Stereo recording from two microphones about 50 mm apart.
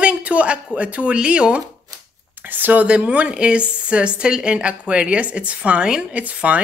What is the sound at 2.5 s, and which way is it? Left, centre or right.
Speech, right.